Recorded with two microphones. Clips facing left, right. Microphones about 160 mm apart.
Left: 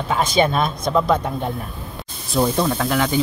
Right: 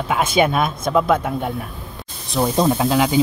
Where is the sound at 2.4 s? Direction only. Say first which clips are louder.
Right 3 dB; 20° right (ahead or behind).